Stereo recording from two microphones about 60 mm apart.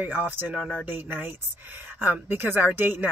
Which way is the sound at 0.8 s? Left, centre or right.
Right.